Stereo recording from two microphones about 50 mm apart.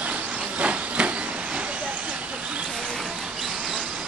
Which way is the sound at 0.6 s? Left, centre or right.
Right.